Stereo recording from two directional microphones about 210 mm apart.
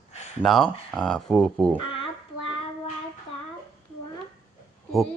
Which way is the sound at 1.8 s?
25° left (ahead or behind).